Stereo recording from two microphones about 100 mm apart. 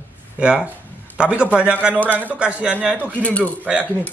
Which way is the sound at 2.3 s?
10° right (ahead or behind).